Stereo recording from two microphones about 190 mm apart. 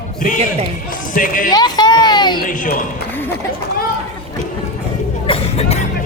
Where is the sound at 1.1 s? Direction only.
45° left (ahead or behind).